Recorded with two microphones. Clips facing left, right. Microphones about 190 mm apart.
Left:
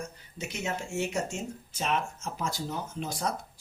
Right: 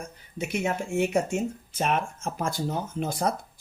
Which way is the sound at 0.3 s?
55° right (ahead or behind).